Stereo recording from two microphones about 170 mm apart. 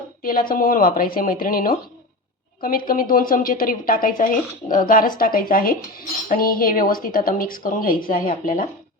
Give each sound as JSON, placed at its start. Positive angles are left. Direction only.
{"t": 0.2, "sound": "speech", "side_deg": 55}